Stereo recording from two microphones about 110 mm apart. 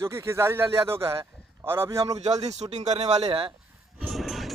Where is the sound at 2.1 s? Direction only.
90° right; by 3.5 s 60° right (ahead or behind).